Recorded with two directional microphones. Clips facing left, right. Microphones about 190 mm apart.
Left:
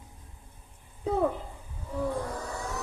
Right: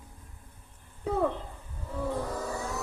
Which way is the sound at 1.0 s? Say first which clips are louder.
Left 1 dB; 10° left (ahead or behind).